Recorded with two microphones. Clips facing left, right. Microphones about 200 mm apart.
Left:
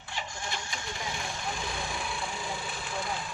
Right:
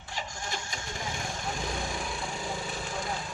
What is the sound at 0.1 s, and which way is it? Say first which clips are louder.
Vehicle: right 1 dB; 40° right (ahead or behind).